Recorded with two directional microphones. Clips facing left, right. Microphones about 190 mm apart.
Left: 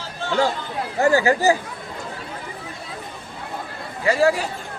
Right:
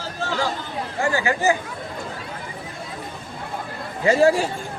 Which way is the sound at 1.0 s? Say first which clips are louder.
Left 5 dB; 40° left (ahead or behind).